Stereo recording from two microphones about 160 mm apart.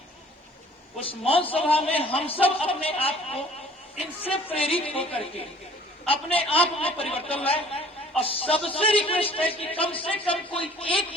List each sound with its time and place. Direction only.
0.9 s speech: 35° left (ahead or behind)
4.2 s music: 10° left (ahead or behind)
4.6 s speech: 35° left (ahead or behind)
6.5 s speech: 35° left (ahead or behind)